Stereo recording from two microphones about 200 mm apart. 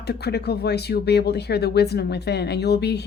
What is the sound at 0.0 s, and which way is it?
Speech, 55° left (ahead or behind).